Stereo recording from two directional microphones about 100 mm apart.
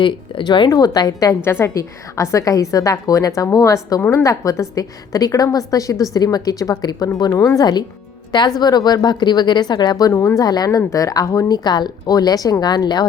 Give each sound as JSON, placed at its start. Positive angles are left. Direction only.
{"t": 0.0, "sound": "speech", "side_deg": 55}
{"t": 0.7, "sound": "speech", "side_deg": 40}
{"t": 1.5, "sound": "speech", "side_deg": 25}
{"t": 7.6, "sound": "speech", "side_deg": 45}
{"t": 10.1, "sound": "speech", "side_deg": 30}